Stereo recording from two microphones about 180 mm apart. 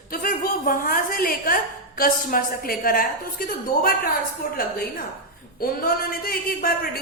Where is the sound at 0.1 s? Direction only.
50° left (ahead or behind).